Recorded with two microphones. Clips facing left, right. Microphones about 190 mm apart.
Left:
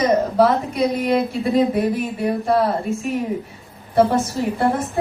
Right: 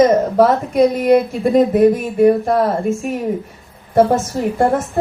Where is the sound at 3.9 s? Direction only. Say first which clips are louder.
Right 3 dB; 45° right (ahead or behind).